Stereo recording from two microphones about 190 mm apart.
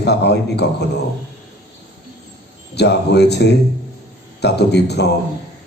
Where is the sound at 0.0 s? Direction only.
60° left (ahead or behind).